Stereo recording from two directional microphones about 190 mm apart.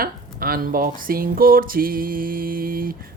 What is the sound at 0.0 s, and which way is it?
Speech, 50° right (ahead or behind).